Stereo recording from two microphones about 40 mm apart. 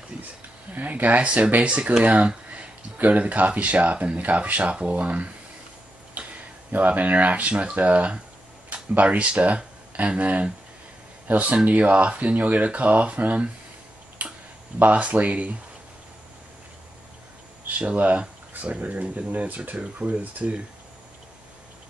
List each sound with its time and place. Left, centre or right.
0.7 s speech: right
3.0 s speech: right
6.2 s tick-tock: right
6.7 s speech: right
14.2 s tick-tock: right
14.8 s speech: right
17.6 s speech: right
19.8 s speech: right